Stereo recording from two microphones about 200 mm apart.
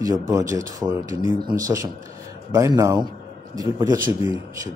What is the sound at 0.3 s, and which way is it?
Speech, 15° right (ahead or behind).